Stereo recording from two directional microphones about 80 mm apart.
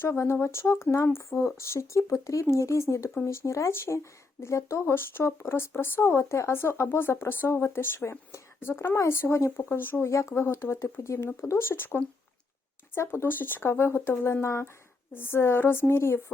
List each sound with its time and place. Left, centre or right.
0.0 s a woman's voice: left
13.1 s a woman's voice: left